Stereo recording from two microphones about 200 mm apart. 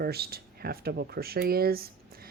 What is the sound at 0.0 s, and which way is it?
Speech, 50° right (ahead or behind).